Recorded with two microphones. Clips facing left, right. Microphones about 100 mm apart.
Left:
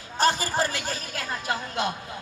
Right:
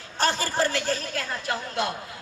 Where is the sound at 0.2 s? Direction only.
15° left (ahead or behind).